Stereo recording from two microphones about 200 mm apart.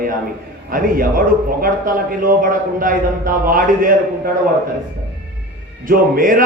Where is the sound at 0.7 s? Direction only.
45° right (ahead or behind).